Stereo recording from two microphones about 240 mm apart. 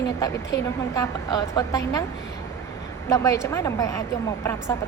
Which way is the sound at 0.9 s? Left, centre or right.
Centre.